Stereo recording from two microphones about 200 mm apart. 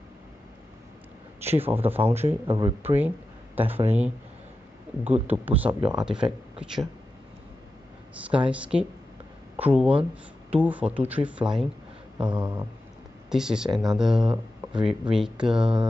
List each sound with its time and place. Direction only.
1.4 s speech: 10° right (ahead or behind)
2.4 s speech: 25° right (ahead or behind)
3.5 s speech: 10° right (ahead or behind)
5.2 s speech: 10° right (ahead or behind)
8.3 s speech: 5° right (ahead or behind)
12.2 s speech: 20° right (ahead or behind)
13.3 s speech: 5° right (ahead or behind)
14.2 s speech: 20° right (ahead or behind)
15.0 s speech: 5° right (ahead or behind)